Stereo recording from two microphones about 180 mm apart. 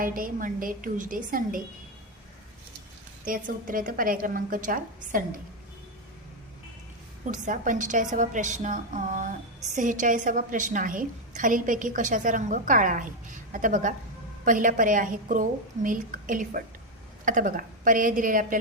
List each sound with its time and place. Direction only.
0.0 s a woman's voice: 50° right (ahead or behind)
3.2 s a woman's voice: 50° right (ahead or behind)
7.3 s a woman's voice: 45° right (ahead or behind)